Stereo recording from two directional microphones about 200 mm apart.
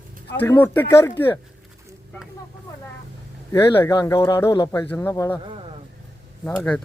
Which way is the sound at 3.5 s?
15° left (ahead or behind).